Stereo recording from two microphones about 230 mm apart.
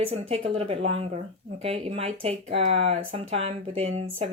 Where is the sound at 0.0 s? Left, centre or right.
Right.